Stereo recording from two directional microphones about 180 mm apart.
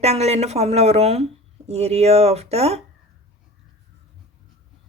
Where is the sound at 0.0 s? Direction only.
35° right (ahead or behind).